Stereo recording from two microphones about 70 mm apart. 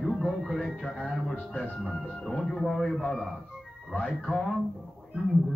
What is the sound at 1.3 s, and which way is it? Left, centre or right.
Speech, left.